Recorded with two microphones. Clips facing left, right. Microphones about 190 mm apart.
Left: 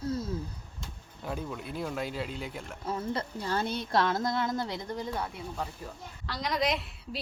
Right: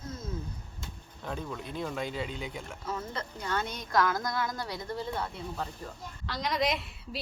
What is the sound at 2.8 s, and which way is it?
A woman's voice, 30° left (ahead or behind).